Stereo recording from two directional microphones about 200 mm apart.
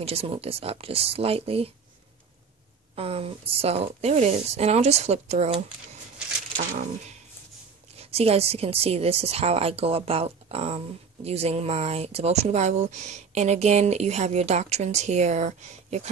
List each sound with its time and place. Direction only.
0.0 s speech: 30° right (ahead or behind)
3.0 s speech: 30° right (ahead or behind)